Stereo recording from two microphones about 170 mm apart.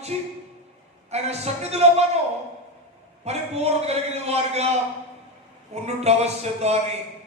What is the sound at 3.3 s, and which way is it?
Speech, 40° right (ahead or behind).